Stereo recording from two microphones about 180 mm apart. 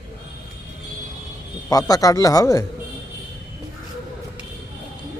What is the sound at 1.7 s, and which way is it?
Speech, 20° left (ahead or behind).